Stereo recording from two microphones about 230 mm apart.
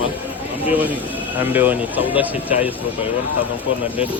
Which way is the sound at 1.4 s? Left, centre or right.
Centre.